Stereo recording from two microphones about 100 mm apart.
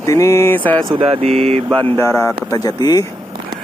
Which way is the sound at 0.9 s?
50° right (ahead or behind).